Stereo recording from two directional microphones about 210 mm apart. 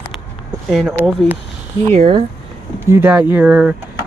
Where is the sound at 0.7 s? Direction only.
5° right (ahead or behind).